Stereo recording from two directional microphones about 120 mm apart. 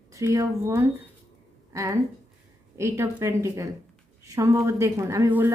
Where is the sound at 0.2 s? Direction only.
20° right (ahead or behind).